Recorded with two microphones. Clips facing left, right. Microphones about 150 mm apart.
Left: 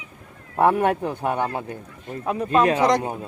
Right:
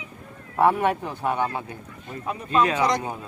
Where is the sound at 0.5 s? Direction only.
50° left (ahead or behind).